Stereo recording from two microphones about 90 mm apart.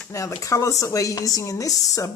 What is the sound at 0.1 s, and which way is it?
Speech, 35° left (ahead or behind).